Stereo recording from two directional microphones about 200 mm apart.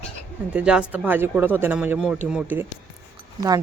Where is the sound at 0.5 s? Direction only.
5° right (ahead or behind).